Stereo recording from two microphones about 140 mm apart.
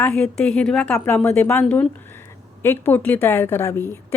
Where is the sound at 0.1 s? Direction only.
5° left (ahead or behind).